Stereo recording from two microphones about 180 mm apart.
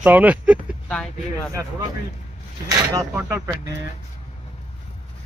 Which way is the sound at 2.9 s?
15° right (ahead or behind).